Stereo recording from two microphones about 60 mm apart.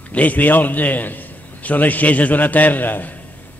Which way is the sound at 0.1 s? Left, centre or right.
Left.